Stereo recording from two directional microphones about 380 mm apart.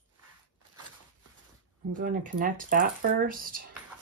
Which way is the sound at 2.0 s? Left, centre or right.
Right.